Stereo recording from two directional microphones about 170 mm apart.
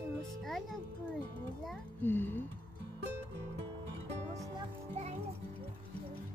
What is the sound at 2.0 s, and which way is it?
Speech, 10° left (ahead or behind).